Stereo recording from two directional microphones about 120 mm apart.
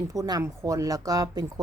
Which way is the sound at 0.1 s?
30° right (ahead or behind).